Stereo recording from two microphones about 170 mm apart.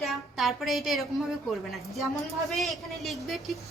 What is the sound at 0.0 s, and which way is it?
A woman's voice, centre (ahead or behind).